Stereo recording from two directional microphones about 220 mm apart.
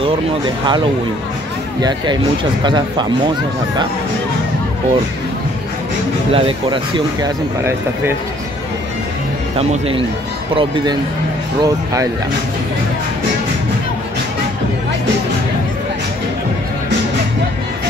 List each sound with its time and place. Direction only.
1.8 s speech: 20° right (ahead or behind)
6.3 s speech: 25° right (ahead or behind)
9.6 s speech: 25° right (ahead or behind)